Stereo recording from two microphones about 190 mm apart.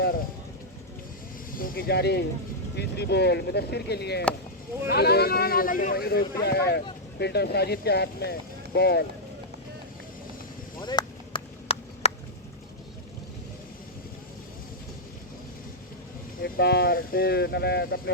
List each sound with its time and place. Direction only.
1.5 s speech: 50° left (ahead or behind)
10.8 s a sound: 20° left (ahead or behind)
16.4 s speech: 55° left (ahead or behind)